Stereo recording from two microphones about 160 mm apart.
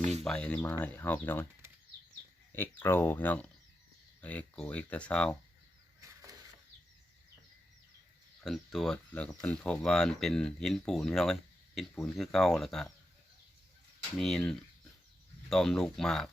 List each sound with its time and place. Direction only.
0.0 s a sound: 45° right (ahead or behind)
0.3 s speech: 5° left (ahead or behind)
2.5 s speech: 15° left (ahead or behind)
8.4 s speech: centre (ahead or behind)
14.2 s speech: 5° left (ahead or behind)